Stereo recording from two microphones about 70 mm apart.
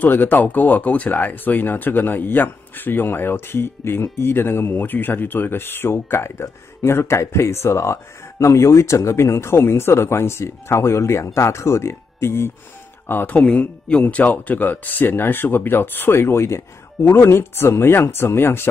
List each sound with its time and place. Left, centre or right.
0.0 s speech: left
13.4 s speech: centre; by 18.7 s left